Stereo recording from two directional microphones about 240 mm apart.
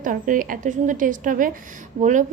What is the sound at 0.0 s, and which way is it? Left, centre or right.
Speech, right.